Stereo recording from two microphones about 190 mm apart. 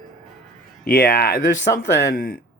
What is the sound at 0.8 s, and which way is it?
Speech, 50° left (ahead or behind).